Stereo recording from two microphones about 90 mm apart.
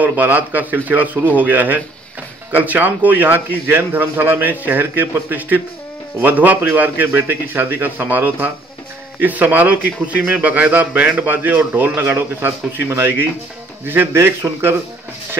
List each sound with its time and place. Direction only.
0.0 s a man's voice: 20° right (ahead or behind)